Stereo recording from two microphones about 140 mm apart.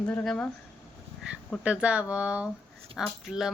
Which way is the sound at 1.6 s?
10° right (ahead or behind).